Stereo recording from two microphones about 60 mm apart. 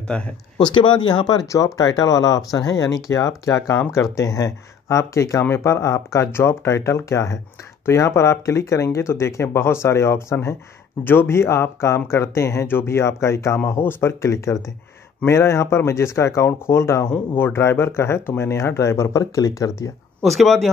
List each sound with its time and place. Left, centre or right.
0.1 s speech: centre
1.4 s speech: left
13.7 s speech: left
20.2 s speech: centre